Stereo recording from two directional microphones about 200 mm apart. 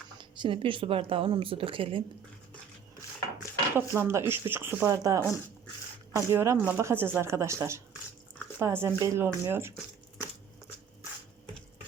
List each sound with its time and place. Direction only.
0.2 s speech: 25° right (ahead or behind)
3.8 s speech: 10° right (ahead or behind)